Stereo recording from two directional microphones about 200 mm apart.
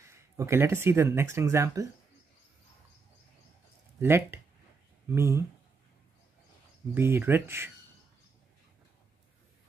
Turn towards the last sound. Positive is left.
turn(degrees=-10)  # may be behind; listen again after turning